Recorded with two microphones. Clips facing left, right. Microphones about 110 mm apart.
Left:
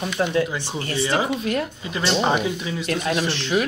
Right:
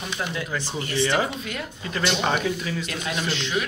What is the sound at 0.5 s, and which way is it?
Speech, 30° left (ahead or behind).